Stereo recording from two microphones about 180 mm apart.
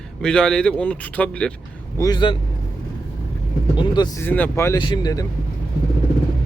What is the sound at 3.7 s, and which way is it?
Speech, 25° left (ahead or behind).